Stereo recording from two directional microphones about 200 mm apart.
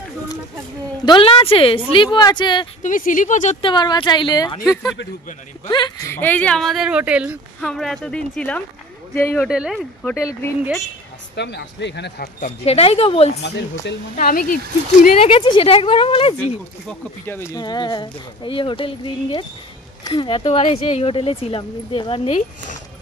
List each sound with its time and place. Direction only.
1.0 s speech: 25° left (ahead or behind)
2.8 s speech: 40° left (ahead or behind)
3.6 s speech: 20° left (ahead or behind)
5.7 s speech: 20° left (ahead or behind)
9.5 s speech: centre (ahead or behind)
10.1 s speech: 15° left (ahead or behind)
11.3 s speech: 60° left (ahead or behind)
12.4 s speech: 35° left (ahead or behind)
13.4 s speech: 60° left (ahead or behind)
14.1 s speech: 45° left (ahead or behind)
15.0 s speech: 30° left (ahead or behind)
17.3 s speech: 15° left (ahead or behind); by 22.8 s 30° left (ahead or behind)